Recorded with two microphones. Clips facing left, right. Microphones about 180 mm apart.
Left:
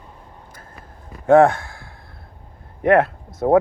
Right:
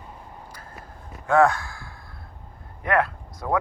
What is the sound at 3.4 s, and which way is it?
Speech, 45° left (ahead or behind).